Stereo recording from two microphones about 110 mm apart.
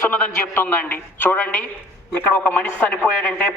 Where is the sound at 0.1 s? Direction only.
15° left (ahead or behind).